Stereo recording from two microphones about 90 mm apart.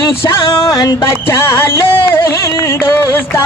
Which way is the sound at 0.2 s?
40° left (ahead or behind).